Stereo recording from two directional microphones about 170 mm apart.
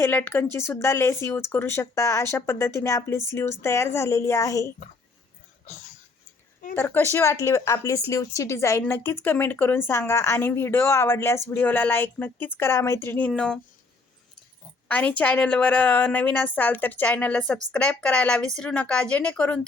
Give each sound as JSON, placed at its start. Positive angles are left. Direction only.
{"t": 0.0, "sound": "speech", "side_deg": 10}
{"t": 6.7, "sound": "speech", "side_deg": 15}
{"t": 14.8, "sound": "speech", "side_deg": 10}